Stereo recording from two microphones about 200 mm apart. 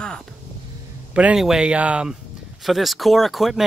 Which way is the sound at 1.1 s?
5° right (ahead or behind).